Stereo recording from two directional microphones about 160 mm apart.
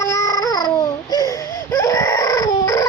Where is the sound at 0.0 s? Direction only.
20° left (ahead or behind).